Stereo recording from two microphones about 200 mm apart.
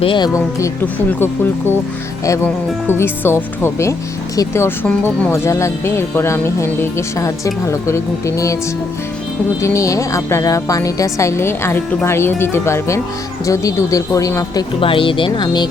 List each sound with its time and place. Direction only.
0.0 s speech: 25° left (ahead or behind)
2.2 s speech: 15° left (ahead or behind)
9.6 s speech: 15° left (ahead or behind)